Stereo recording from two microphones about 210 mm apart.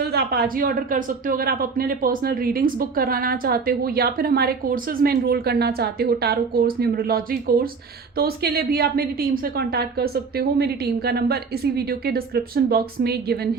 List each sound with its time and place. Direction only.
0.0 s speech: 50° right (ahead or behind)